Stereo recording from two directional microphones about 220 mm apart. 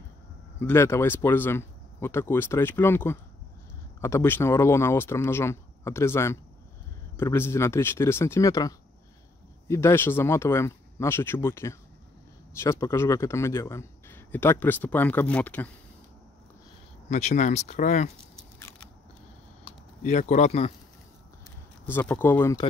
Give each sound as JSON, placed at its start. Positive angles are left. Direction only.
{"t": 0.6, "sound": "speech", "side_deg": 10}
{"t": 17.1, "sound": "speech", "side_deg": 30}
{"t": 20.0, "sound": "speech", "side_deg": 35}
{"t": 21.8, "sound": "speech", "side_deg": 10}